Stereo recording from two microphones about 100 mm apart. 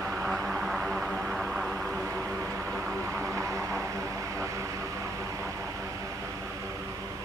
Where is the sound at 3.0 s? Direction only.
30° right (ahead or behind).